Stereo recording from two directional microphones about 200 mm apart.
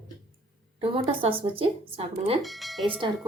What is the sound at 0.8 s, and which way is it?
Speech, 30° right (ahead or behind).